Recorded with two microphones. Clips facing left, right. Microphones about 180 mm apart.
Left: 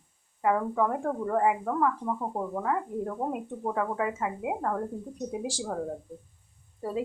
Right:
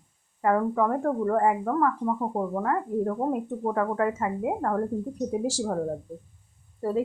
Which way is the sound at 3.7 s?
5° left (ahead or behind).